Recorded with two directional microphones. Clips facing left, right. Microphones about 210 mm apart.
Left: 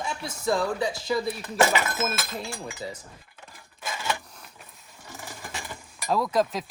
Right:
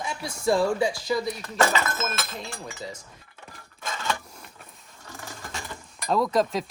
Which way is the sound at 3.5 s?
5° left (ahead or behind).